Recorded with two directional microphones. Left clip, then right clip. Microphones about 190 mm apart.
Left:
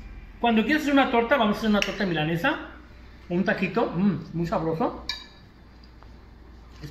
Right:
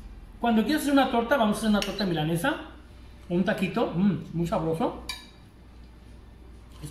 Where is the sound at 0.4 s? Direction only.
20° right (ahead or behind).